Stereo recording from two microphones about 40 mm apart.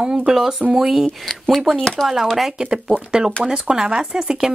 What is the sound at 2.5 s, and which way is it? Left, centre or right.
Speech, right.